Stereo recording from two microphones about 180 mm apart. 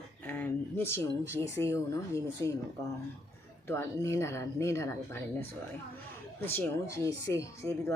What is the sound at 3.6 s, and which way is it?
Speech, 15° left (ahead or behind).